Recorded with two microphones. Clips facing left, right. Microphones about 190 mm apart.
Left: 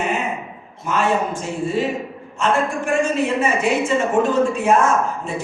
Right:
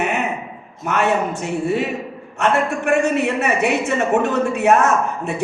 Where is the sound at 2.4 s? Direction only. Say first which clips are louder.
Right 1 dB; 65° right (ahead or behind).